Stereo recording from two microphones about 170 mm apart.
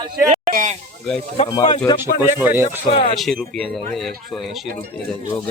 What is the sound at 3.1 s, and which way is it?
Speech, centre (ahead or behind).